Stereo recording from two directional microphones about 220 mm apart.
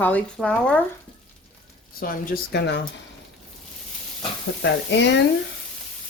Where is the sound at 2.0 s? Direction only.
40° left (ahead or behind).